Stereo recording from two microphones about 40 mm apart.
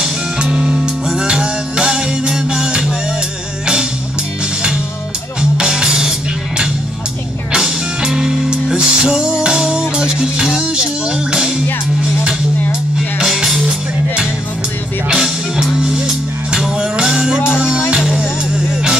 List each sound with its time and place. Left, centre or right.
0.0 s music: centre
5.4 s music: right
13.2 s music: centre
15.1 s music: centre